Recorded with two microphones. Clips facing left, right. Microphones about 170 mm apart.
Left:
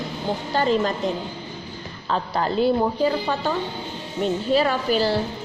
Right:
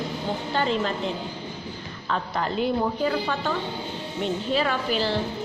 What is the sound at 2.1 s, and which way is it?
A woman's voice, 30° left (ahead or behind).